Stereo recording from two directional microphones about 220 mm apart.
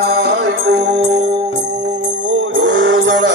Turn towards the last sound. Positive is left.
turn(degrees=-60)  # may be behind; listen again after turning